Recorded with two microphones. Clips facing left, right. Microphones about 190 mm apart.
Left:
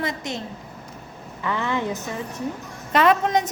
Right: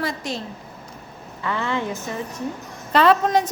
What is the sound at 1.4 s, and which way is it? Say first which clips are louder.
A woman's voice: even; 15° left (ahead or behind).